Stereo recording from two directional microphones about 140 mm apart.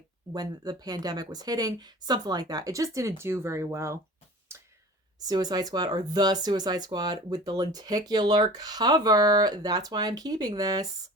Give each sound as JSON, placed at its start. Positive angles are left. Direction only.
{"t": 0.3, "sound": "speech", "side_deg": -30}
{"t": 4.5, "sound": "a sound", "side_deg": -20}
{"t": 5.3, "sound": "speech", "side_deg": -25}